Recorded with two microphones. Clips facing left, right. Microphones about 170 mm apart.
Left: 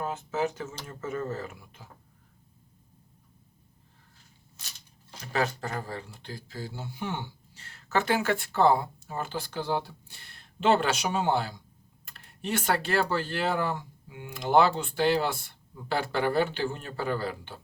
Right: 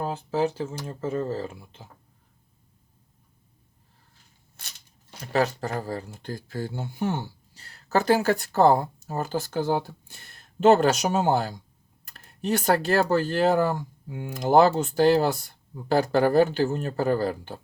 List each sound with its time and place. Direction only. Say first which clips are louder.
0.0 s speech: right 4 dB; 35° right (ahead or behind)
5.3 s speech: right 5 dB; 35° right (ahead or behind)